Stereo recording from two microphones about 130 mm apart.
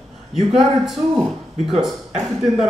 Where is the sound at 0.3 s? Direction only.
Centre (ahead or behind).